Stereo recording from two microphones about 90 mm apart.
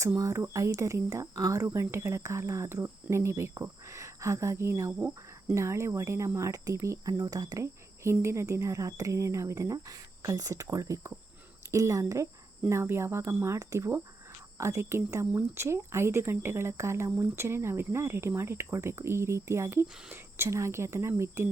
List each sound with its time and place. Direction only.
0.2 s speech: 35° right (ahead or behind)
4.9 s speech: 15° right (ahead or behind)
5.5 s speech: 30° right (ahead or behind)